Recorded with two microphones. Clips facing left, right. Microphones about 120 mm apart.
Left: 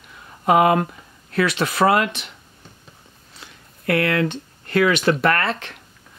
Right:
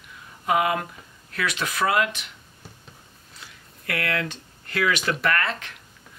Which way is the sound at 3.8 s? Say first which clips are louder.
Left 8 dB; 30° left (ahead or behind).